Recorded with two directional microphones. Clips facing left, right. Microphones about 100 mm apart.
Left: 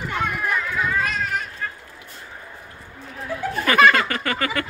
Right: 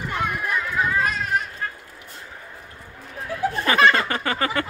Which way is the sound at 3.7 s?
25° right (ahead or behind).